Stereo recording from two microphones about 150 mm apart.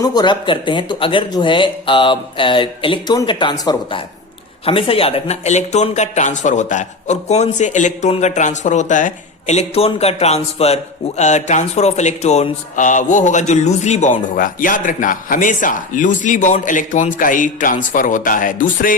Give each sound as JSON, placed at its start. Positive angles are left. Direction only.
{"t": 0.0, "sound": "speech", "side_deg": 25}